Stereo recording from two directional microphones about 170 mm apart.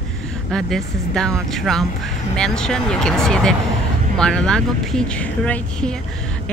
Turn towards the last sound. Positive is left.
turn(degrees=5)  # may be behind; listen again after turning